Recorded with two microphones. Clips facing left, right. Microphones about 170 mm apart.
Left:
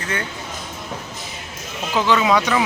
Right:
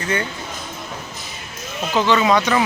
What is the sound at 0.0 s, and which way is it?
Speech, centre (ahead or behind).